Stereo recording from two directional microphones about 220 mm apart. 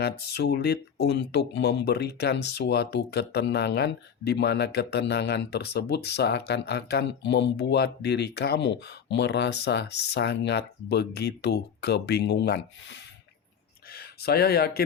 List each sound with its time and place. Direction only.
0.0 s a man's voice: 45° left (ahead or behind)